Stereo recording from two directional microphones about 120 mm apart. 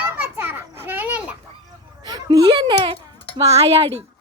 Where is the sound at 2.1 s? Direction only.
40° right (ahead or behind).